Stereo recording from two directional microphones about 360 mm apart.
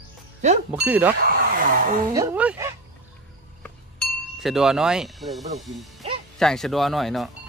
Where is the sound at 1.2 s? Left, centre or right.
Right.